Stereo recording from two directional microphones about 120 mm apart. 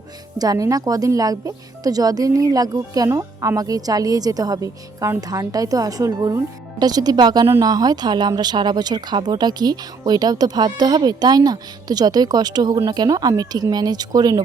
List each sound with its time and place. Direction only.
0.3 s speech: 30° right (ahead or behind)